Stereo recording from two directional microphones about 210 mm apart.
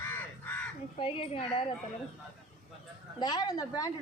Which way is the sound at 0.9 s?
25° left (ahead or behind).